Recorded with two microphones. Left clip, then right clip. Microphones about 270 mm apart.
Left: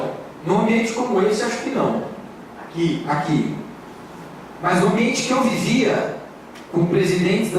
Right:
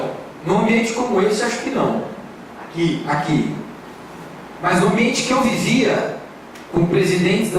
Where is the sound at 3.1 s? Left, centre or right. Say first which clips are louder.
Right 1 dB; centre.